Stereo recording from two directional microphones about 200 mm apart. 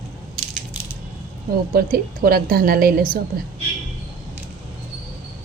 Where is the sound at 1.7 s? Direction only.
45° right (ahead or behind).